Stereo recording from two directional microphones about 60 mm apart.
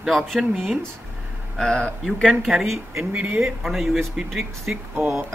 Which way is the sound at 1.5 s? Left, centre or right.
Centre.